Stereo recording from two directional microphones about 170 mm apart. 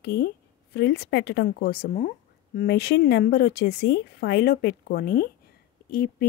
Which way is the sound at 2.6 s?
75° left (ahead or behind).